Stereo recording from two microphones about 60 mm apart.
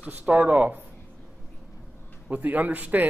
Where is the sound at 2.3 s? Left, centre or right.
Right.